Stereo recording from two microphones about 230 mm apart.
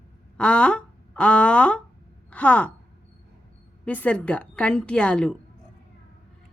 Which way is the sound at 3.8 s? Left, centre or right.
Centre.